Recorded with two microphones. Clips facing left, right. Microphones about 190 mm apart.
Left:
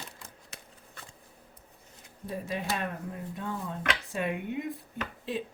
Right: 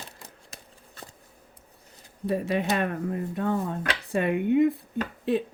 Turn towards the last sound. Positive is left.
turn(degrees=-60)  # may be behind; listen again after turning